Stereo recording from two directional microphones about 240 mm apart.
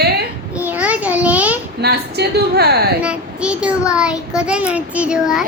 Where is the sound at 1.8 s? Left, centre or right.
Right.